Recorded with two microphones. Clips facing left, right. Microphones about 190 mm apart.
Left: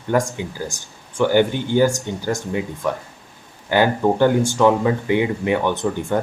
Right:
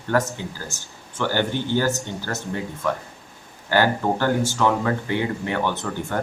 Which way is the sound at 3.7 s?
20° left (ahead or behind).